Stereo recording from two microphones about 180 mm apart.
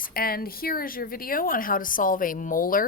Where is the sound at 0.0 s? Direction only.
55° left (ahead or behind).